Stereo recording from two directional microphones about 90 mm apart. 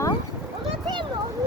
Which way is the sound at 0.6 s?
70° right (ahead or behind).